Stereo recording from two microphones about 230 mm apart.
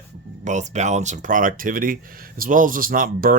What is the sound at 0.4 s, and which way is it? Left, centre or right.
Speech, right.